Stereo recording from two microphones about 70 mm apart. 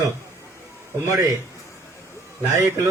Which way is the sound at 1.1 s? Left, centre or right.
Right.